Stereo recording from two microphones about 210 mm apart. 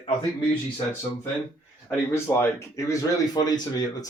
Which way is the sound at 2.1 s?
10° left (ahead or behind).